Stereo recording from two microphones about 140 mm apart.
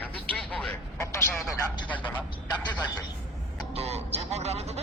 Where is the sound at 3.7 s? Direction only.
50° right (ahead or behind).